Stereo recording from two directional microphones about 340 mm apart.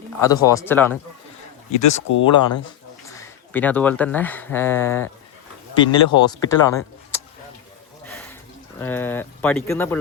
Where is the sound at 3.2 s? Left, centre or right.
Centre.